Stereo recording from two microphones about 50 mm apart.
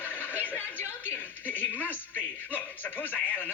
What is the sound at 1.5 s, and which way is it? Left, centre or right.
Speech, left.